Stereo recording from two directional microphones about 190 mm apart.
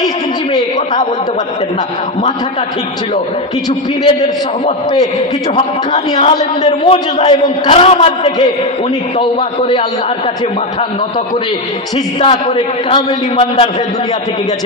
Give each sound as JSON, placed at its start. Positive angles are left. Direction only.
{"t": 6.1, "sound": "a man's voice", "side_deg": 25}
{"t": 12.2, "sound": "a man's voice", "side_deg": 25}